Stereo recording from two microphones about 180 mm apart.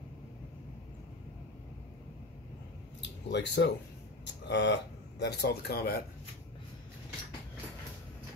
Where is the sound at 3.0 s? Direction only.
75° left (ahead or behind).